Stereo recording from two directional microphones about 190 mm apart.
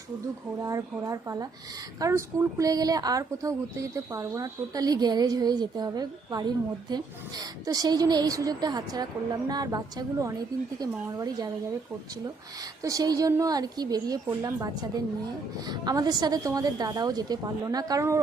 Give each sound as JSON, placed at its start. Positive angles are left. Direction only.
{"t": 0.6, "sound": "speech", "side_deg": -15}
{"t": 12.8, "sound": "speech", "side_deg": -20}